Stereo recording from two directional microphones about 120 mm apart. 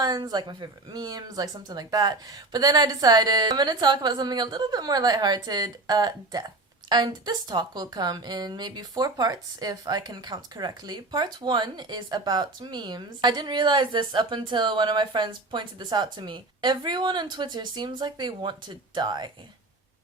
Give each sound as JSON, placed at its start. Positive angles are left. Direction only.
{"t": 0.0, "sound": "a woman's voice", "side_deg": -35}